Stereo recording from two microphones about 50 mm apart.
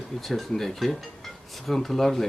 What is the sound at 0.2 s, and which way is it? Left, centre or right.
Speech, centre.